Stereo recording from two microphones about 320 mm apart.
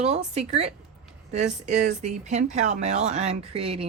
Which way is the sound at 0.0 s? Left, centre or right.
Right.